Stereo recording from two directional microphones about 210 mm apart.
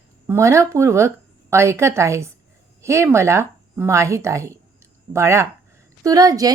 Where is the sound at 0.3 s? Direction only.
15° right (ahead or behind).